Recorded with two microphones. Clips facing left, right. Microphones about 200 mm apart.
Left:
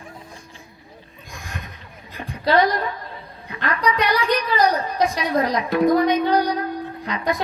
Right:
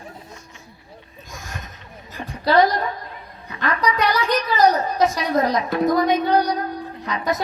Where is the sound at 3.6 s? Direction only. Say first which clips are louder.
Right 1 dB; 45° right (ahead or behind).